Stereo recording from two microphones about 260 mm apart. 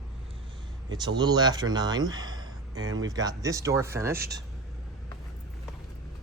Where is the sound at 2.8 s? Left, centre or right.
Right.